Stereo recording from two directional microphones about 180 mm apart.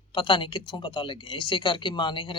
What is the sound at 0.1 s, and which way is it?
Speech, 25° left (ahead or behind).